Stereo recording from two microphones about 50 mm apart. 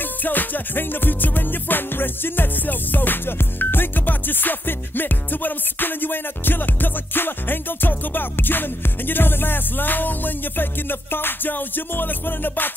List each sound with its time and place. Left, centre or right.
0.0 s music: left